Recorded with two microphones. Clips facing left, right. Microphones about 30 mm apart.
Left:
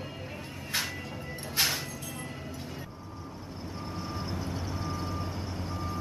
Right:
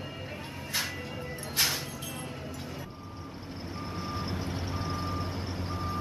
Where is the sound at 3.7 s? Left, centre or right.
Right.